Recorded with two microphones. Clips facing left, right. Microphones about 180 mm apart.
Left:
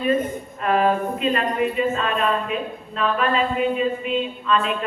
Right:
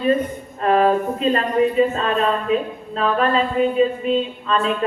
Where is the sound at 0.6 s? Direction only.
35° right (ahead or behind).